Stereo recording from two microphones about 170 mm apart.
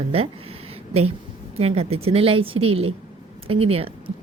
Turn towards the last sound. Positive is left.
turn(degrees=-35)  # may be behind; listen again after turning